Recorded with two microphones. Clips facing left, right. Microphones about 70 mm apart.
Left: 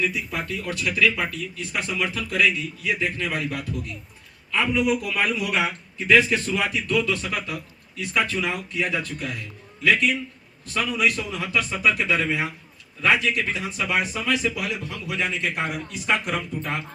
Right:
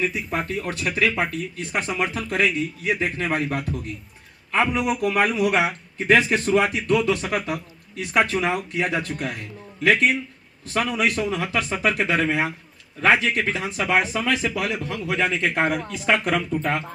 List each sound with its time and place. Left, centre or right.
0.0 s a man's voice: right
11.8 s speech: right
12.3 s a man's voice: right
13.1 s speech: right